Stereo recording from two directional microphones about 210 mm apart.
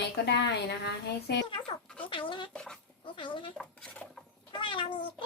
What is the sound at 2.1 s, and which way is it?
Speech, 25° left (ahead or behind).